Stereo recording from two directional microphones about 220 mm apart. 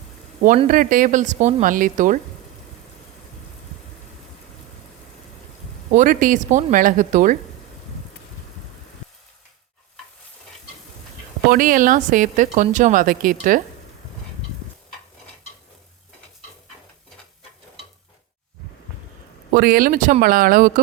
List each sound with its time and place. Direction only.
0.4 s speech: 35° right (ahead or behind)
5.9 s speech: 35° right (ahead or behind)
11.4 s speech: 40° right (ahead or behind)
19.5 s speech: 45° right (ahead or behind)